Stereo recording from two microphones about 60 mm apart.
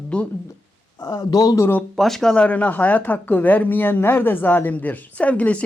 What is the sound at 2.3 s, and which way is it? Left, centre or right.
A woman's voice, left.